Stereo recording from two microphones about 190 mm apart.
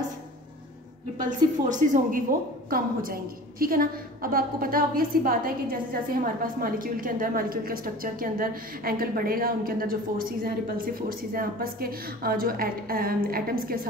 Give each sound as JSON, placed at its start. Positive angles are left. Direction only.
{"t": 1.7, "sound": "a woman's voice", "side_deg": -45}